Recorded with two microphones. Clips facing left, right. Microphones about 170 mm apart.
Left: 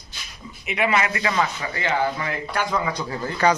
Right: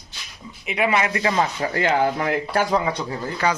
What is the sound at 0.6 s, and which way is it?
Speech, 30° right (ahead or behind).